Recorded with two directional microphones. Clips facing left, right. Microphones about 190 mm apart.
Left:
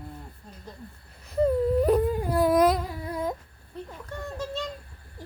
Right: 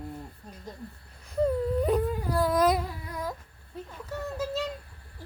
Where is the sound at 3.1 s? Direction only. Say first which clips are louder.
Left 6 dB; 25° left (ahead or behind).